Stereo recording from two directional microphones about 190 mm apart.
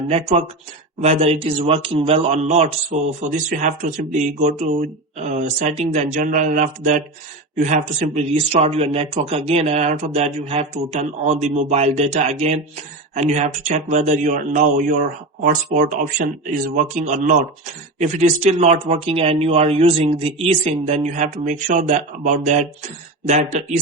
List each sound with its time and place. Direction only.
0.1 s speech: 35° right (ahead or behind)